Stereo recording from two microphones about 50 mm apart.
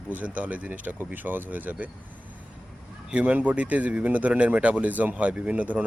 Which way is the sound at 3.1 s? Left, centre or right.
Right.